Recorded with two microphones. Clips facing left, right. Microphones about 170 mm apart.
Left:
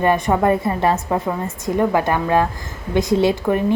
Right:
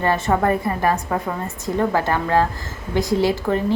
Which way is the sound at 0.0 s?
15° left (ahead or behind).